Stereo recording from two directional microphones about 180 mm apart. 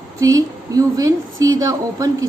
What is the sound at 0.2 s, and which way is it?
Speech, 20° right (ahead or behind).